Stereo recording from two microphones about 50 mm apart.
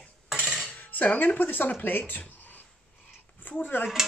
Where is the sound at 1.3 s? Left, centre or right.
Left.